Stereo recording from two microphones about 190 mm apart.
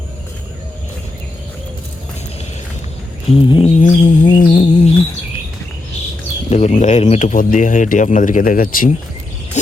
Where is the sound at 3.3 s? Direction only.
30° left (ahead or behind).